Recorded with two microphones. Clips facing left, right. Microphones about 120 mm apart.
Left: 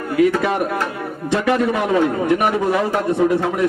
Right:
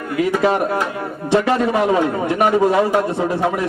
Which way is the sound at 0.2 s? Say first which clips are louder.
Left 4 dB; 15° right (ahead or behind).